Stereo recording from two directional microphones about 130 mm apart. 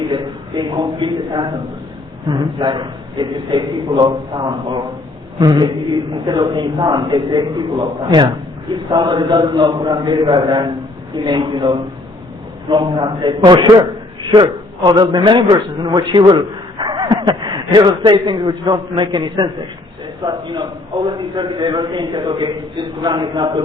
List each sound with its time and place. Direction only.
0.1 s a man's voice: 35° right (ahead or behind)